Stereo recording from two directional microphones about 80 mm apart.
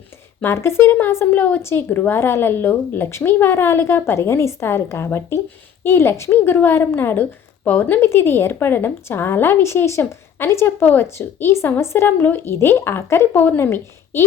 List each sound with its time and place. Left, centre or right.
0.4 s a woman's voice: left